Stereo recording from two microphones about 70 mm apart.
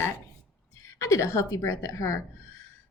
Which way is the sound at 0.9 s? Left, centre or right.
Left.